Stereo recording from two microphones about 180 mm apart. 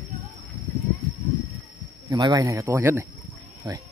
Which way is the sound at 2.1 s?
20° right (ahead or behind).